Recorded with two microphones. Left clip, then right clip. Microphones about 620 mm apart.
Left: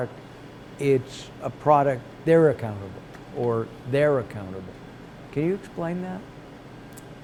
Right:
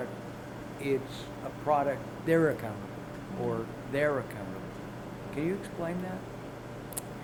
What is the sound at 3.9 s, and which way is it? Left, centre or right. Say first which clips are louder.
Speech: left 8 dB; left.